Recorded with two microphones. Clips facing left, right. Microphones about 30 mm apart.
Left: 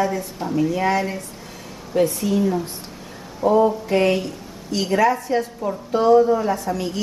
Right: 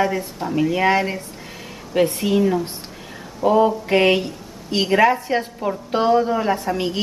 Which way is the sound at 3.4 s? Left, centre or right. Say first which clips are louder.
Right 1 dB; right.